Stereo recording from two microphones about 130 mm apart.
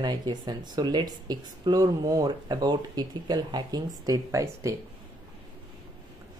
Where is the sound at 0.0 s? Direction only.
35° right (ahead or behind).